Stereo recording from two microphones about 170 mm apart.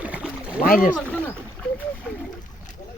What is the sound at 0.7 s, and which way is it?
Speech, 55° left (ahead or behind).